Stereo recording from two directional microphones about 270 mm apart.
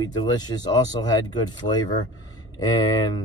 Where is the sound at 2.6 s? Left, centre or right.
Centre.